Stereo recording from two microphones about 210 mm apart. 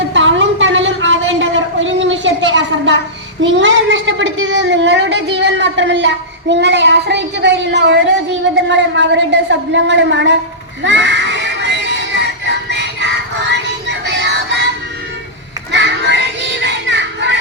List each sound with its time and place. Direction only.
0.1 s a sound: 65° right (ahead or behind)
3.4 s a woman's voice: 60° right (ahead or behind)
10.8 s synthetic singing: 60° right (ahead or behind)
15.7 s music: 60° right (ahead or behind)